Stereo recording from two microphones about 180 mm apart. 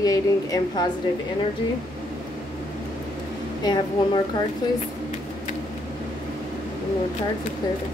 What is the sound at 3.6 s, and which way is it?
Speech, 25° left (ahead or behind).